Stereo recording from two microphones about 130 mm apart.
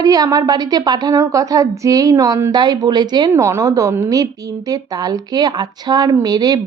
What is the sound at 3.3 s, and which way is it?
A woman's voice, 20° right (ahead or behind).